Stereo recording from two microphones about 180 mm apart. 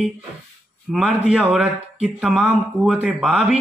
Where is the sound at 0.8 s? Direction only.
5° right (ahead or behind).